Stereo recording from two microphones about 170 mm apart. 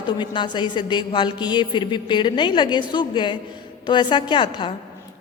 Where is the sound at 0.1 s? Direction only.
25° left (ahead or behind).